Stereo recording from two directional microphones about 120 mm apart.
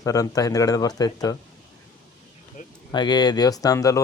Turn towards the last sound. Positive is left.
turn(degrees=30)  # may be behind; listen again after turning